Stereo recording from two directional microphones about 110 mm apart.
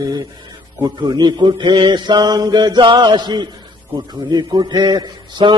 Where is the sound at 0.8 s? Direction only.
35° right (ahead or behind).